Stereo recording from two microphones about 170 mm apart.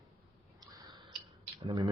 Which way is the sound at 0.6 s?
20° right (ahead or behind).